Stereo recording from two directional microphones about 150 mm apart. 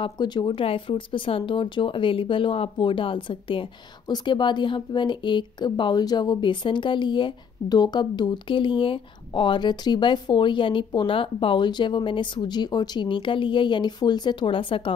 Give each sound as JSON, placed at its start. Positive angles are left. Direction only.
{"t": 0.0, "sound": "a woman's voice", "side_deg": 30}